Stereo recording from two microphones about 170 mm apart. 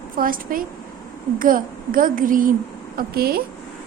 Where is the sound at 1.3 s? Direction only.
55° right (ahead or behind).